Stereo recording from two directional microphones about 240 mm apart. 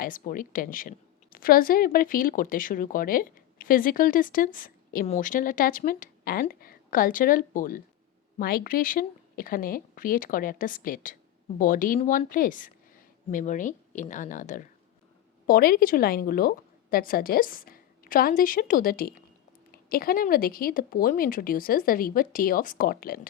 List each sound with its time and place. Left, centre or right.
0.0 s a woman's voice: left